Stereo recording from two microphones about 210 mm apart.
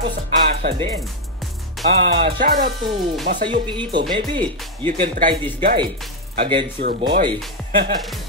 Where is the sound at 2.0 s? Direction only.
50° right (ahead or behind).